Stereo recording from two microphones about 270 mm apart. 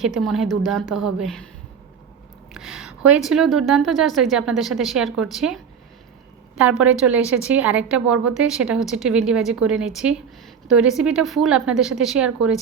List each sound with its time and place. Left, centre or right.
0.0 s a woman's voice: centre
2.5 s a woman's voice: centre
6.6 s a woman's voice: centre